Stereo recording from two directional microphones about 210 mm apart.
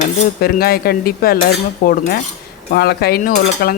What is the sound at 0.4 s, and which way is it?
Speech, 45° left (ahead or behind).